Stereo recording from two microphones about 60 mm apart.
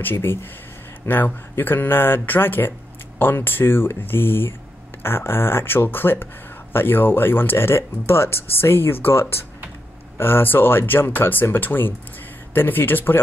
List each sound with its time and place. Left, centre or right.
0.0 s speech: left